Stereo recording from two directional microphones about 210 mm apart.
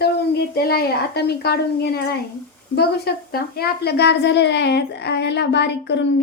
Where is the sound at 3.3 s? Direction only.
45° left (ahead or behind).